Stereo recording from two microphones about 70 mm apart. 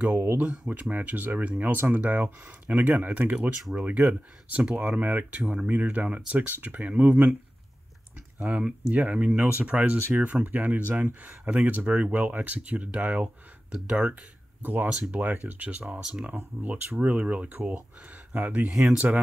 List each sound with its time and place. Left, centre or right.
0.4 s speech: right
3.3 s speech: centre
3.8 s speech: right
8.4 s speech: centre
13.7 s speech: centre
14.6 s speech: right